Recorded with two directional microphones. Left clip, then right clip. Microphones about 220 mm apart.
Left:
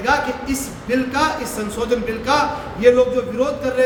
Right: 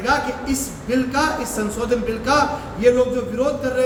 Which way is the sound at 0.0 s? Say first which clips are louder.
Left 2 dB; 15° left (ahead or behind).